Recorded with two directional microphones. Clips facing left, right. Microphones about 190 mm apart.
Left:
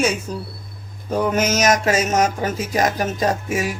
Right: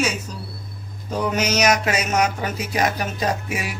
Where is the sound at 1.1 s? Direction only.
50° left (ahead or behind).